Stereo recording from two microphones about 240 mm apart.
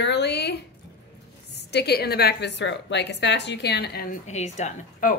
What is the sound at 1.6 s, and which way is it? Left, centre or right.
A woman's voice, left.